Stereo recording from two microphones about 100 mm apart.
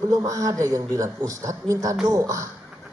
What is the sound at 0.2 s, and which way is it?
Speech, 35° right (ahead or behind).